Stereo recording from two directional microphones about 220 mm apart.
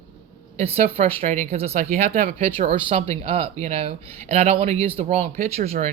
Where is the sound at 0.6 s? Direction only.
30° right (ahead or behind).